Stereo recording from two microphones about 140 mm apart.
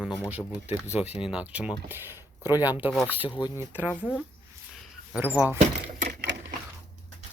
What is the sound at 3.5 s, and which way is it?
Speech, 15° right (ahead or behind).